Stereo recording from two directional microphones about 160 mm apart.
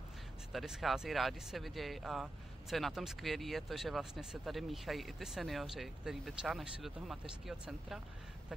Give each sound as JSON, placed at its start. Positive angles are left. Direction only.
{"t": 0.5, "sound": "speech", "side_deg": 0}